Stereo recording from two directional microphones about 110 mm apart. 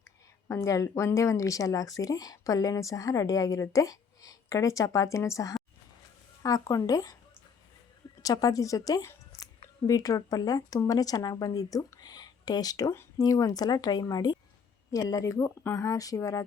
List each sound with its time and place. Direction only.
0.4 s speech: 25° left (ahead or behind)
8.2 s speech: 35° left (ahead or behind)